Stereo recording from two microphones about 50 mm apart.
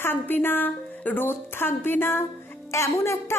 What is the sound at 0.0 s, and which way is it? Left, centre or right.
A woman's voice, left.